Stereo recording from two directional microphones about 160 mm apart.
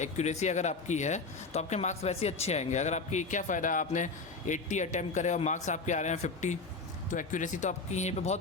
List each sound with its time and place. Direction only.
0.0 s speech: 45° left (ahead or behind)